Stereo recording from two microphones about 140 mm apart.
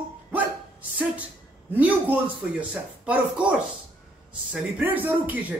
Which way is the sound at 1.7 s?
10° right (ahead or behind).